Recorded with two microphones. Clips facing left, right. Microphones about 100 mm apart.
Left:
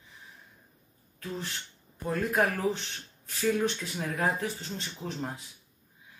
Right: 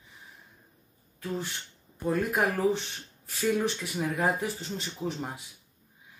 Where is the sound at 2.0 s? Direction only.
10° right (ahead or behind).